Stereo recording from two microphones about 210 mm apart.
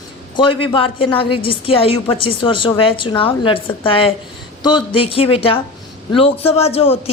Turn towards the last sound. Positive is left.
turn(degrees=30)  # may be behind; listen again after turning